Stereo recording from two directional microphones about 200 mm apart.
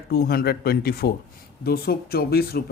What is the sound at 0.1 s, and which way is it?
Speech, 50° left (ahead or behind).